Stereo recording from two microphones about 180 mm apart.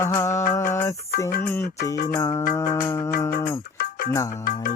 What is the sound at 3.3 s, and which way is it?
Music, 55° left (ahead or behind).